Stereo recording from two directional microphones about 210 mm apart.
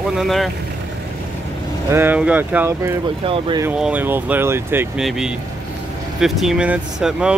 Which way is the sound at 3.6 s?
5° right (ahead or behind).